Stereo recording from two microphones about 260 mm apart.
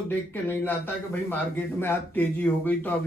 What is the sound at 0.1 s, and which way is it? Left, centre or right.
Speech, centre.